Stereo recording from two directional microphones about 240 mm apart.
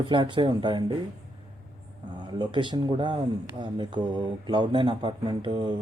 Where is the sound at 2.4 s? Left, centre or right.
Centre.